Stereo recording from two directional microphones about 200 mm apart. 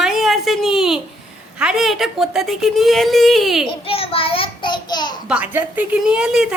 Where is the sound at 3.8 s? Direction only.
30° left (ahead or behind).